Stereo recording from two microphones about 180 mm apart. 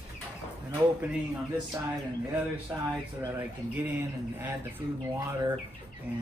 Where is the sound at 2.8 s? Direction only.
15° right (ahead or behind).